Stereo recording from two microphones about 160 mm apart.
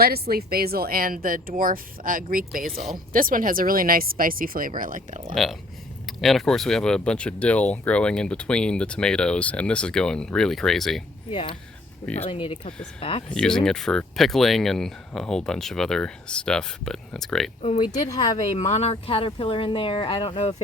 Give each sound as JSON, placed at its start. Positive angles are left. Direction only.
{"t": 0.0, "sound": "speech", "side_deg": -75}
{"t": 5.3, "sound": "speech", "side_deg": 0}
{"t": 11.3, "sound": "speech", "side_deg": 35}
{"t": 13.3, "sound": "speech", "side_deg": 5}
{"t": 17.6, "sound": "speech", "side_deg": 40}
{"t": 17.8, "sound": "speech", "side_deg": 25}
{"t": 18.3, "sound": "speech", "side_deg": 45}